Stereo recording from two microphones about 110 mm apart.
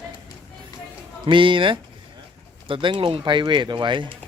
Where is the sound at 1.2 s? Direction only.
50° right (ahead or behind).